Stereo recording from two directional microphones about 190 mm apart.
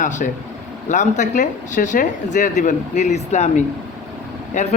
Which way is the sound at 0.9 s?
40° left (ahead or behind).